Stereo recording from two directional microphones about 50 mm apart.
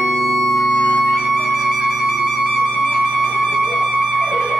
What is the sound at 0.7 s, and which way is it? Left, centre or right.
Music, left.